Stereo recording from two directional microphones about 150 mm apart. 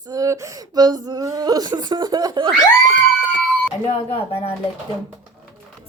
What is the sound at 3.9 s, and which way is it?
Speech, 40° left (ahead or behind).